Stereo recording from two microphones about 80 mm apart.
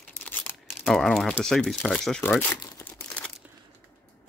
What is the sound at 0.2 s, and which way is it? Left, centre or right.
Crumpling, left.